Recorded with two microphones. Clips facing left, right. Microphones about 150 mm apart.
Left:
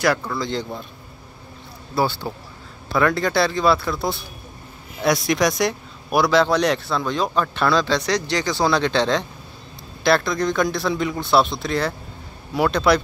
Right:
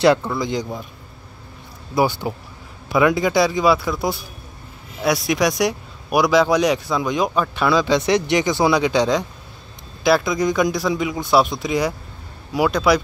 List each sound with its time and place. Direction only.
0.0 s a man's voice: 20° right (ahead or behind)
2.0 s a man's voice: 15° right (ahead or behind)